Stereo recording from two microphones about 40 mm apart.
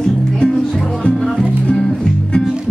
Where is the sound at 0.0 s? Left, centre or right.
Centre.